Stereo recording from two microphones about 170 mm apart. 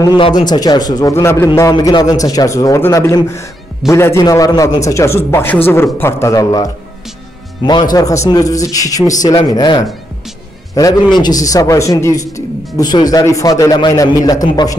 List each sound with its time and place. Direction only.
0.0 s a man's voice: 25° left (ahead or behind)